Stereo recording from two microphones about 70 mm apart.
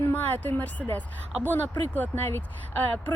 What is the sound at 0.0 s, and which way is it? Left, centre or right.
Speech, left.